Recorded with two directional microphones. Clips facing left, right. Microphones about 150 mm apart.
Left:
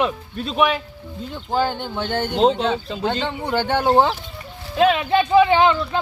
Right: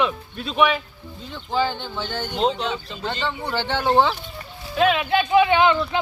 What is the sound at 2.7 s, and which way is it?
Speech, 45° left (ahead or behind).